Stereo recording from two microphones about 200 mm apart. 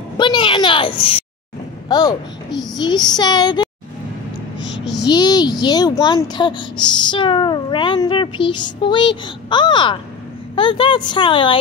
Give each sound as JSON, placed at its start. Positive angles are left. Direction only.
{"t": 0.2, "sound": "a woman's voice", "side_deg": 25}
{"t": 4.6, "sound": "a sound", "side_deg": 20}
{"t": 5.0, "sound": "speech", "side_deg": 20}